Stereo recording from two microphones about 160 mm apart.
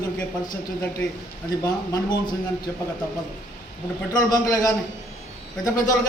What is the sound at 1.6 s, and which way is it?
Speech, 25° left (ahead or behind).